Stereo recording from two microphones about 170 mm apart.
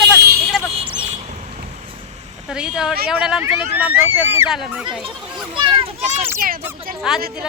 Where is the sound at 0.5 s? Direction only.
5° right (ahead or behind).